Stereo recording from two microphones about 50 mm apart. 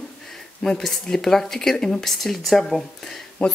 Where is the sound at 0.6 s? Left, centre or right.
Centre.